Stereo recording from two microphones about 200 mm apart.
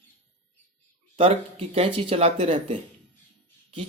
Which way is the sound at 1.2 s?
30° right (ahead or behind).